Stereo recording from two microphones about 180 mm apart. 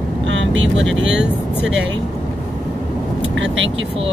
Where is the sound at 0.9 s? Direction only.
90° right.